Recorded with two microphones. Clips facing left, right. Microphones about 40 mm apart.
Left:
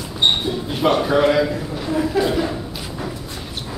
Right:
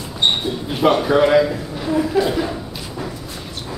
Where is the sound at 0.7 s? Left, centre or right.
Centre.